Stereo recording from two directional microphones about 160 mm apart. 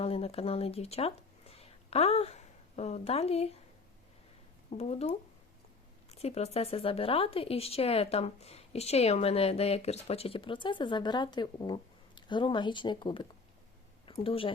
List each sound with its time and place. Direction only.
0.0 s speech: 40° left (ahead or behind)
4.8 s speech: 40° left (ahead or behind)